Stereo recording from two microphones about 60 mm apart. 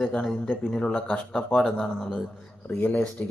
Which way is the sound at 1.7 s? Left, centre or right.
Centre.